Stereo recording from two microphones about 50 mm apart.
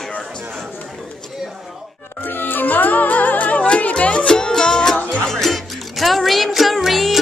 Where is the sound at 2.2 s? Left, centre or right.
Left; by 5.0 s centre.